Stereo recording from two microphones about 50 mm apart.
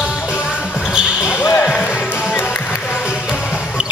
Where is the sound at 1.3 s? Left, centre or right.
Left.